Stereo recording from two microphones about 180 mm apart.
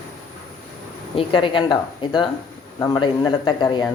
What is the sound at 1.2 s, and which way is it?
Speech, 30° left (ahead or behind).